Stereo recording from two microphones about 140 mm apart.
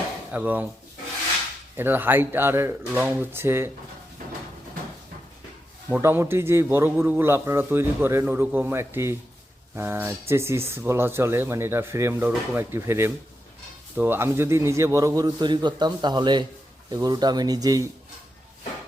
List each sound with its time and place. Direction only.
0.3 s speech: 10° right (ahead or behind)
1.7 s speech: 15° right (ahead or behind)
5.9 s a man's voice: 15° right (ahead or behind)